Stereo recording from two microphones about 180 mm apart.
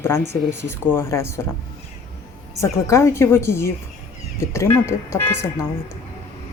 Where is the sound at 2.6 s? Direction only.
15° left (ahead or behind).